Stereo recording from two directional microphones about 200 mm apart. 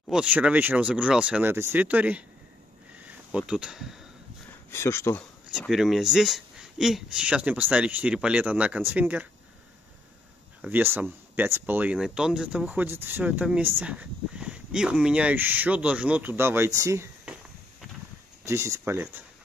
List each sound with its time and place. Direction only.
0.1 s speech: 5° right (ahead or behind)
3.3 s speech: 5° right (ahead or behind)
4.6 s speech: 15° left (ahead or behind)
5.5 s speech: centre (ahead or behind)
10.6 s speech: 10° right (ahead or behind)
18.4 s speech: 15° right (ahead or behind)